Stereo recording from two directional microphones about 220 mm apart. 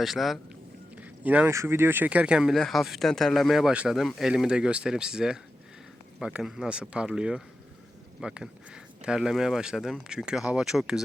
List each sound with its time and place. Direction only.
0.0 s speech: centre (ahead or behind)